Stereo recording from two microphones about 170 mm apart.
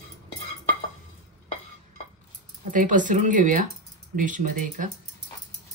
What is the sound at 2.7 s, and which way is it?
Speech, 50° right (ahead or behind).